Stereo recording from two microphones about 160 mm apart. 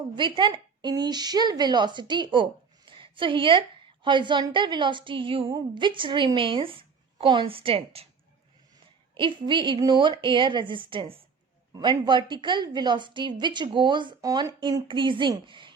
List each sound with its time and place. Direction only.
0.2 s a woman's voice: 30° right (ahead or behind)
9.1 s a woman's voice: 30° right (ahead or behind)